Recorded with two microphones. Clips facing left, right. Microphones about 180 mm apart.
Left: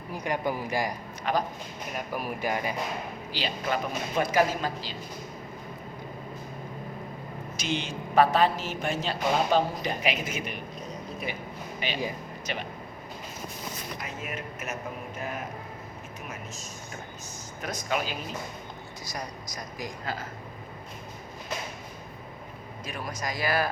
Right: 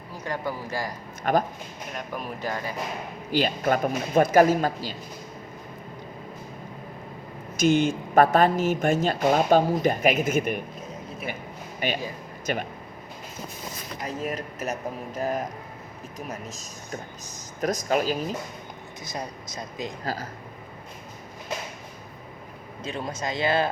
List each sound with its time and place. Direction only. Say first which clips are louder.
0.1 s speech: left 2 dB; 15° left (ahead or behind)
1.2 s speech: right 5 dB; 50° right (ahead or behind)
2.0 s speech: left 1 dB; 10° left (ahead or behind)
3.3 s speech: right 7 dB; 50° right (ahead or behind)
7.5 s speech: right 11 dB; 45° right (ahead or behind)
11.8 s speech: right 3 dB; 45° right (ahead or behind)
14.1 s speech: right 6 dB; 35° right (ahead or behind)
19.0 s speech: right 3 dB; 25° right (ahead or behind)
22.8 s speech: right 4 dB; 25° right (ahead or behind)